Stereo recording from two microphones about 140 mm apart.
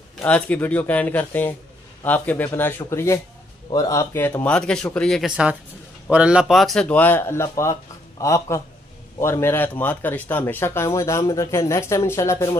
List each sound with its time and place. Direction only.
0.2 s speech: 10° left (ahead or behind)
5.2 s speech: 5° right (ahead or behind); by 12.4 s 20° left (ahead or behind)